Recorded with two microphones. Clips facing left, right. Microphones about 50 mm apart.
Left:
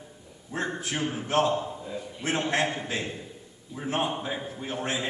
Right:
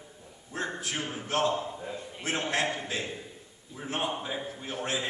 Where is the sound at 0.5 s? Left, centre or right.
Left.